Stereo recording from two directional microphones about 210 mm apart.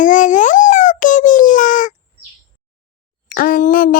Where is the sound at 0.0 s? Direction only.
40° left (ahead or behind).